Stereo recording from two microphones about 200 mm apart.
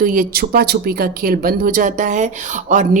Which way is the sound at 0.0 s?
45° right (ahead or behind).